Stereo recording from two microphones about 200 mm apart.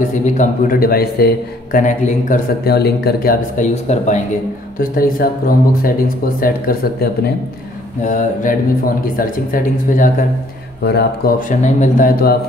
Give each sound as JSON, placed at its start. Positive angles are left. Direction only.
{"t": 0.2, "sound": "a man's voice", "side_deg": 35}
{"t": 8.0, "sound": "a sound", "side_deg": 40}
{"t": 9.0, "sound": "a man's voice", "side_deg": 45}
{"t": 10.8, "sound": "a man's voice", "side_deg": 55}